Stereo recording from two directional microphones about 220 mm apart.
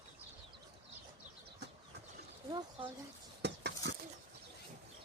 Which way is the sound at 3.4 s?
50° right (ahead or behind).